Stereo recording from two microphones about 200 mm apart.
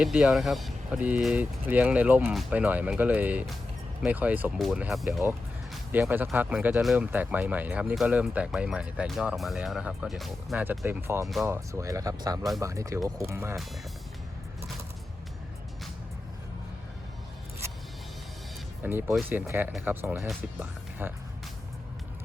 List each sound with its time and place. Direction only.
0.0 s speech: 5° right (ahead or behind)
5.7 s music: 10° right (ahead or behind)
6.3 s speech: 10° right (ahead or behind)
18.8 s speech: 10° right (ahead or behind)